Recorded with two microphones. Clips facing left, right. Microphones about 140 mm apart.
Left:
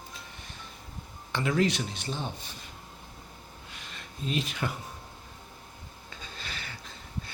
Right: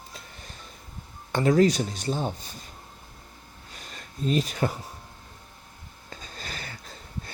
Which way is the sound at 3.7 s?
40° right (ahead or behind).